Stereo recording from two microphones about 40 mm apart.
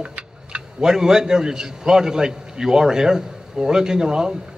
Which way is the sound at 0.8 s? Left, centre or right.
Centre.